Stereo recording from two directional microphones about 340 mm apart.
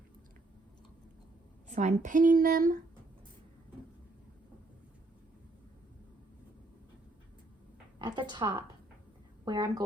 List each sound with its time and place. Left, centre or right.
1.7 s speech: right
7.9 s speech: centre